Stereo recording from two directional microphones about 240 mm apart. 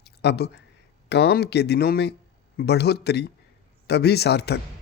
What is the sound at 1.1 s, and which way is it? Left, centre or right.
Speech, left.